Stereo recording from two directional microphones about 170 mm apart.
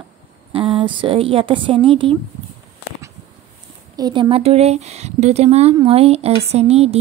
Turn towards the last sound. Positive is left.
turn(degrees=-35)  # may be behind; listen again after turning